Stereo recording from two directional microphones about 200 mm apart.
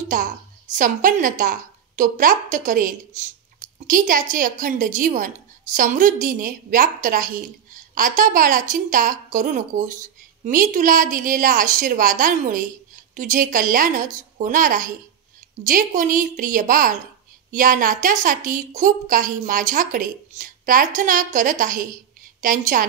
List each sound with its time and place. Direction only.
0.1 s a woman's voice: 40° right (ahead or behind)